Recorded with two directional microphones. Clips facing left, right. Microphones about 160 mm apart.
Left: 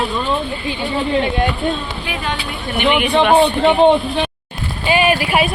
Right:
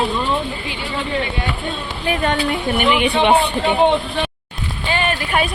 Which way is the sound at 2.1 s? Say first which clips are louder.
Right 8 dB; 55° right (ahead or behind).